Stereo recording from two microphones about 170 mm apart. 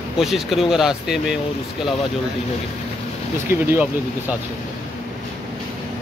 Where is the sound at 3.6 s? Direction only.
15° right (ahead or behind).